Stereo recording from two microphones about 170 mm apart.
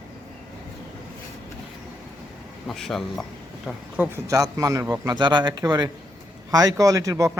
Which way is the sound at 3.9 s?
10° right (ahead or behind).